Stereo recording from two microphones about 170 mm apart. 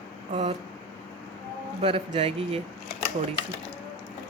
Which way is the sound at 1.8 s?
35° right (ahead or behind).